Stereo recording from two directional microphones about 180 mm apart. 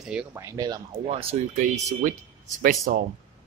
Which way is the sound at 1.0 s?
30° right (ahead or behind).